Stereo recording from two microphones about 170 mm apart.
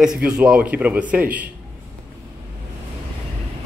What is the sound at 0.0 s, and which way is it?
A man's voice, 5° right (ahead or behind).